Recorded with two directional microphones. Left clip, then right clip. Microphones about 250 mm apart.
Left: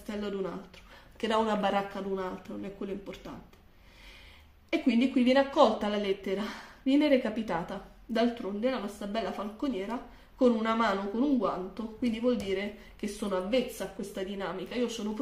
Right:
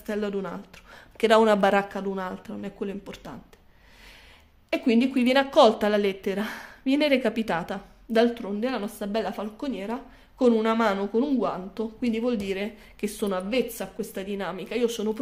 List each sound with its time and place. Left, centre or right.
0.0 s a woman's voice: right
4.6 s a woman's voice: right